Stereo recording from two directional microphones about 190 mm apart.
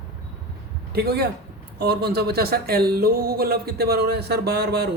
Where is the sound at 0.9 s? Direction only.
55° right (ahead or behind).